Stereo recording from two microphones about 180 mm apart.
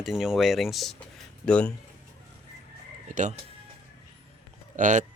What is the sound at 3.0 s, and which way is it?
Speech, 45° right (ahead or behind).